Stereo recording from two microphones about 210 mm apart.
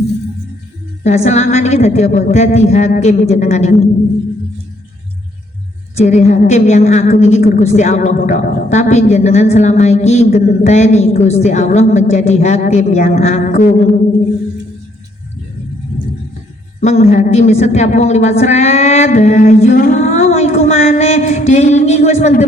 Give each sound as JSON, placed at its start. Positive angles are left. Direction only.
{"t": 1.0, "sound": "a woman's voice", "side_deg": 35}
{"t": 6.0, "sound": "a woman's voice", "side_deg": 35}
{"t": 16.8, "sound": "a woman's voice", "side_deg": 30}